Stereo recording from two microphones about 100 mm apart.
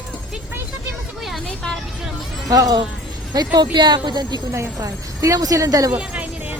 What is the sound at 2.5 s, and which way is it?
Speech, 35° right (ahead or behind).